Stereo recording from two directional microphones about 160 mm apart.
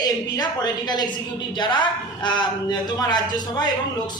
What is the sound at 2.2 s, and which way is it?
A woman's voice, 30° left (ahead or behind).